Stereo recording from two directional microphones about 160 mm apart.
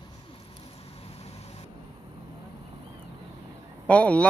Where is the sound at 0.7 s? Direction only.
40° left (ahead or behind).